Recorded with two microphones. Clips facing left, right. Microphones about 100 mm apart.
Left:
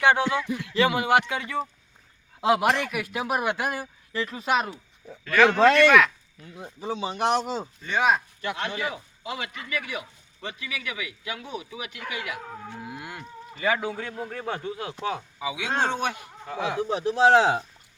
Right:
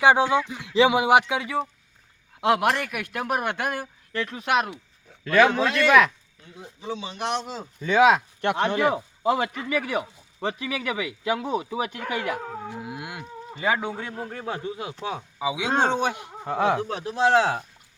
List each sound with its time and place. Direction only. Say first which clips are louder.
0.0 s a man's voice: right 3 dB; 15° right (ahead or behind); by 4.8 s centre (ahead or behind)
6.6 s speech: left 2 dB; 35° left (ahead or behind)
8.0 s speech: right 4 dB; 75° right (ahead or behind); by 8.9 s 55° right (ahead or behind)
8.9 s speech: right 11 dB; 40° right (ahead or behind)
12.7 s moo: right 3 dB; 15° right (ahead or behind)
13.6 s speech: right 1 dB; 20° right (ahead or behind)
14.3 s speech: even; 5° right (ahead or behind)
16.5 s speech: right 6 dB; 55° right (ahead or behind)
16.9 s a man's voice: left 2 dB; 10° left (ahead or behind)